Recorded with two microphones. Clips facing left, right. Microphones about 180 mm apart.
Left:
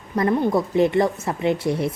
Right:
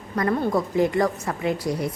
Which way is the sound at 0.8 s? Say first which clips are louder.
Left 3 dB; 25° left (ahead or behind).